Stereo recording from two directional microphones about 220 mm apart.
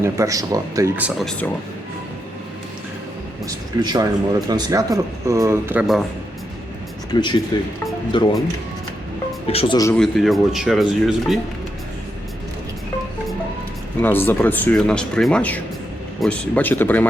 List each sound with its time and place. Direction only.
0.0 s speech: 15° right (ahead or behind); by 1.5 s centre (ahead or behind)
3.4 s speech: 20° right (ahead or behind)
7.1 s speech: 20° left (ahead or behind)
9.5 s speech: 25° left (ahead or behind)
9.9 s speech: centre (ahead or behind)
14.0 s speech: 10° left (ahead or behind)